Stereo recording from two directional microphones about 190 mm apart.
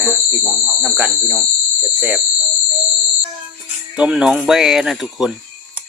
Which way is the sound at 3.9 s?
5° right (ahead or behind).